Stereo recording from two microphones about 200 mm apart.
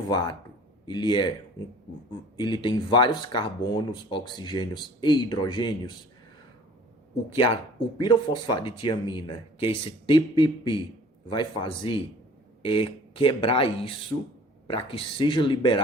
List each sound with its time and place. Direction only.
0.1 s speech: 20° left (ahead or behind)
7.3 s speech: 25° left (ahead or behind)